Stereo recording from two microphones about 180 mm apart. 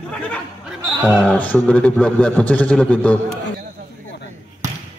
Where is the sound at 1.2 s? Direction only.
10° left (ahead or behind).